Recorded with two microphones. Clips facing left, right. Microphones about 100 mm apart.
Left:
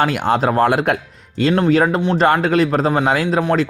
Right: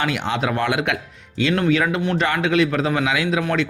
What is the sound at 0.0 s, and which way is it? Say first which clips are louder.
Speech: left 6 dB; 45° left (ahead or behind).